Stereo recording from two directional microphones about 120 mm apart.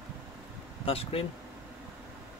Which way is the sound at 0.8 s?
55° left (ahead or behind).